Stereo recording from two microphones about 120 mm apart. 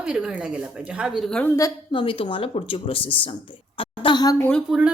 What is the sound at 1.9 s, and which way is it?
Speech, 45° left (ahead or behind).